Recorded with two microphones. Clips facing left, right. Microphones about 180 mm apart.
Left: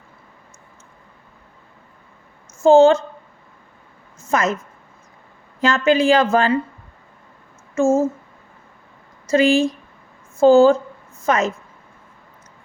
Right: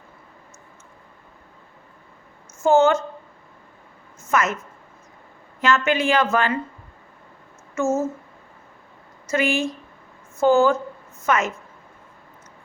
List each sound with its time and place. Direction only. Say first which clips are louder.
2.6 s speech: left 6 dB; 30° left (ahead or behind)
4.3 s a woman's voice: left 2 dB; 35° left (ahead or behind)
5.5 s speech: left 4 dB; 35° left (ahead or behind)
7.8 s speech: left 6 dB; 30° left (ahead or behind)
9.3 s speech: left 7 dB; 35° left (ahead or behind)